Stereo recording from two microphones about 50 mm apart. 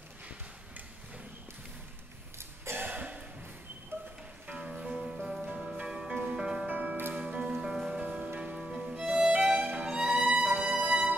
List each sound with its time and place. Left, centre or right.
2.3 s throat clearing: right
3.9 s music: right
4.6 s music: centre
5.8 s music: right
6.7 s music: right
7.2 s music: centre
7.5 s music: centre
8.0 s music: right
8.5 s music: centre
9.3 s music: right